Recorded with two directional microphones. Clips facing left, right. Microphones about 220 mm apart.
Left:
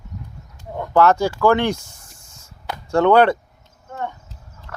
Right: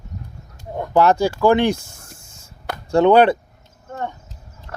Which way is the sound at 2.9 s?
15° right (ahead or behind).